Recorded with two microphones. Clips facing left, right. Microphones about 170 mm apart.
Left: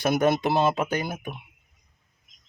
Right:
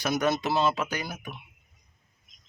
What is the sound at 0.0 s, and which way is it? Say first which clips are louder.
Speech: left 4 dB; 55° left (ahead or behind).